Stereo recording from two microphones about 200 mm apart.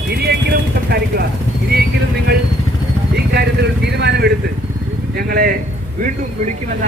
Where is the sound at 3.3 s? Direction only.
55° right (ahead or behind).